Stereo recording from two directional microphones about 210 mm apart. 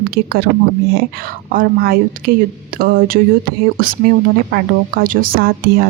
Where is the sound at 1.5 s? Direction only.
45° right (ahead or behind).